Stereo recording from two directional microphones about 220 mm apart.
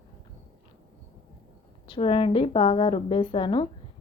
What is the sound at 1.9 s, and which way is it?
A woman's voice, 25° left (ahead or behind).